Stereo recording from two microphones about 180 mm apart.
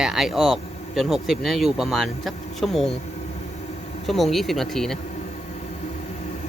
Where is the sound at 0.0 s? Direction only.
Centre (ahead or behind).